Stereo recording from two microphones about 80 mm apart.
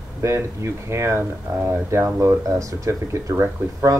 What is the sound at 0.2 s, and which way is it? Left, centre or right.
Speech, right.